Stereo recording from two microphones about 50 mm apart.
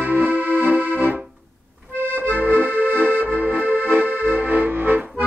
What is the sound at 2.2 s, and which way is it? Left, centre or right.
Accordion, right.